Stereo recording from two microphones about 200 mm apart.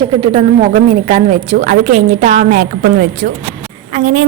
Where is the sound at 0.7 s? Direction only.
40° right (ahead or behind).